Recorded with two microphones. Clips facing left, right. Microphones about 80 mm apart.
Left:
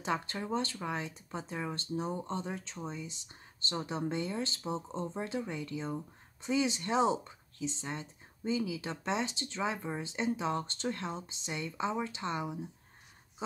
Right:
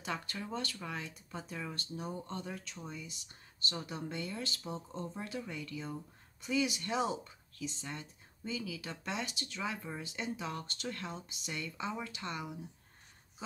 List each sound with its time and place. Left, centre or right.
0.0 s speech: left